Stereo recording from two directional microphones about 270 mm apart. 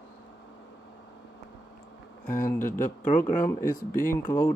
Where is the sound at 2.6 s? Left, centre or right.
Left.